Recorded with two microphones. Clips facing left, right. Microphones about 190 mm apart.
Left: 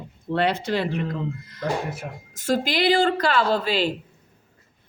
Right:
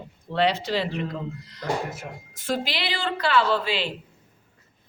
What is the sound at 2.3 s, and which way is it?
A woman's voice, 45° left (ahead or behind).